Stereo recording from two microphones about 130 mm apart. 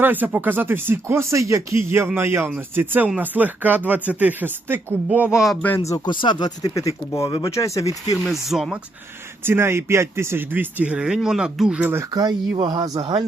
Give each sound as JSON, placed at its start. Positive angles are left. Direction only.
{"t": 0.0, "sound": "speech", "side_deg": -15}
{"t": 6.2, "sound": "speech", "side_deg": 30}
{"t": 8.2, "sound": "speech", "side_deg": 0}
{"t": 9.4, "sound": "speech", "side_deg": -20}
{"t": 12.1, "sound": "speech", "side_deg": -30}